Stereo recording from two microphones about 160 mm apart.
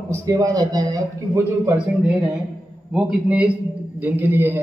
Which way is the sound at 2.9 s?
5° right (ahead or behind).